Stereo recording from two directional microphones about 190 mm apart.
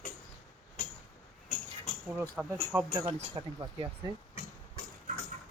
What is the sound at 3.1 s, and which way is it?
Speech, 30° right (ahead or behind).